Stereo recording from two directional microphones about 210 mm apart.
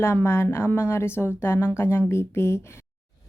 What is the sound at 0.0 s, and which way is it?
A woman's voice, 10° left (ahead or behind).